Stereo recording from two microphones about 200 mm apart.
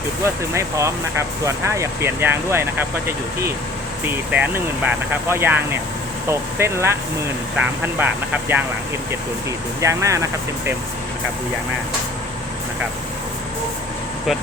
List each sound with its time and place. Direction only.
0.5 s speech: 15° right (ahead or behind)
4.0 s speech: 5° right (ahead or behind)
9.8 s speech: 15° right (ahead or behind)